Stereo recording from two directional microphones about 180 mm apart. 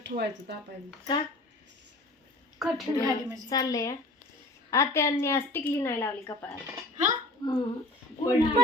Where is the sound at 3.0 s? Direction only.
20° right (ahead or behind).